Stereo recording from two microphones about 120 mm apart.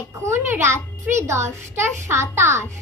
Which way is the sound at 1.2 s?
20° right (ahead or behind).